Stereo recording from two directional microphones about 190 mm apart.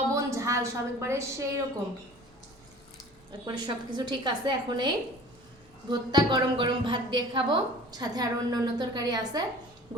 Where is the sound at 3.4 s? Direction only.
20° right (ahead or behind).